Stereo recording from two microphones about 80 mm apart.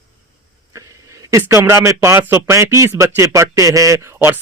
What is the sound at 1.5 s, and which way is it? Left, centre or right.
Speech, right.